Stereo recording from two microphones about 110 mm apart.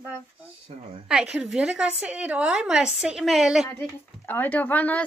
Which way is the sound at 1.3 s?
5° right (ahead or behind).